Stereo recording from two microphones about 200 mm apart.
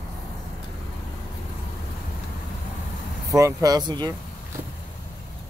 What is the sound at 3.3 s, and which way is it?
Speech, 15° right (ahead or behind).